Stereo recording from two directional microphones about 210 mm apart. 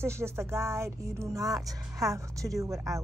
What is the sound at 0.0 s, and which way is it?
Speech, 10° right (ahead or behind).